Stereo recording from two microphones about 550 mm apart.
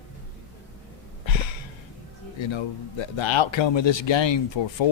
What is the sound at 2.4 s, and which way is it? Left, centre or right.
Speech, left.